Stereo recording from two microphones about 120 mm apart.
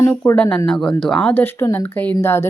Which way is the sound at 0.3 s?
10° left (ahead or behind).